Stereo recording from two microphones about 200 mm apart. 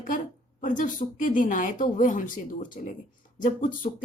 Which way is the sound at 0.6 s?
40° left (ahead or behind).